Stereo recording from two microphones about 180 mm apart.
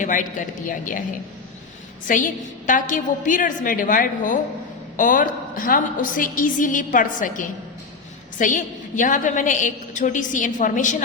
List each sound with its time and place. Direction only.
0.0 s a woman's voice: 45° left (ahead or behind)
2.0 s a woman's voice: 45° left (ahead or behind)